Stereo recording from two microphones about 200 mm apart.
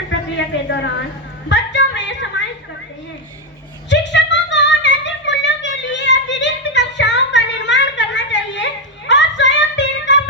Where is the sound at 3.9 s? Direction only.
60° left (ahead or behind).